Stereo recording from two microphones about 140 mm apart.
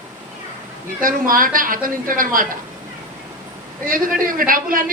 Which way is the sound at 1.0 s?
85° right.